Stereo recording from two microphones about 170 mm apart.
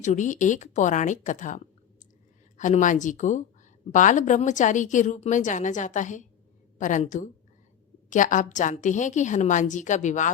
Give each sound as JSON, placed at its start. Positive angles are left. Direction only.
{"t": 0.0, "sound": "a woman's voice", "side_deg": 45}